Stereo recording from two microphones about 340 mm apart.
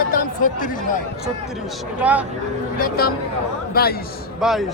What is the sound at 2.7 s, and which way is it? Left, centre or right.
Speech, left.